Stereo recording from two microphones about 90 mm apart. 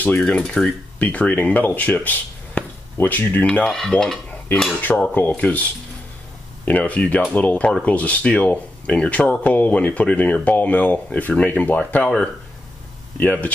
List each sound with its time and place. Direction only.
0.2 s speech: 10° left (ahead or behind)
3.7 s dishes: 5° left (ahead or behind)
4.7 s speech: 15° left (ahead or behind)
6.6 s speech: 15° left (ahead or behind)
13.2 s speech: 20° left (ahead or behind)